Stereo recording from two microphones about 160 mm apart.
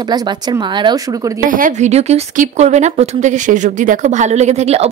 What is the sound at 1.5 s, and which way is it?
Speech, 60° right (ahead or behind).